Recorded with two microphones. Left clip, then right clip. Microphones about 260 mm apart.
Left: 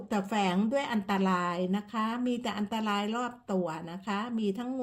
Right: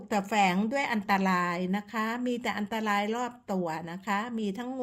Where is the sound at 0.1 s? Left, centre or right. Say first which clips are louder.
Right 4 dB; right.